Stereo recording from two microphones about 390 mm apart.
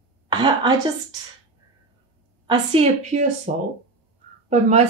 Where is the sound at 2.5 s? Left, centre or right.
Centre.